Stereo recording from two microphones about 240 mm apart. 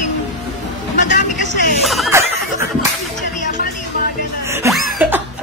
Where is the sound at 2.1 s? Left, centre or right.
Centre.